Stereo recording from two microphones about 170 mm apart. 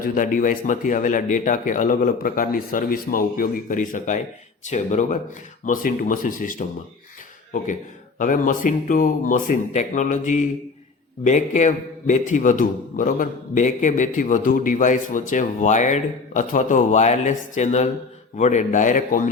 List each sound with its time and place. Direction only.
0.0 s a man's voice: 50° left (ahead or behind)
8.2 s a man's voice: 50° left (ahead or behind)